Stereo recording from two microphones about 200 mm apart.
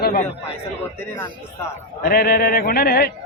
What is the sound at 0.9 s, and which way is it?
Speech, 10° left (ahead or behind).